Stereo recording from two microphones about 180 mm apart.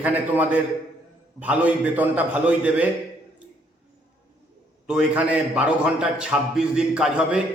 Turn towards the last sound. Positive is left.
turn(degrees=-5)  # may be behind; listen again after turning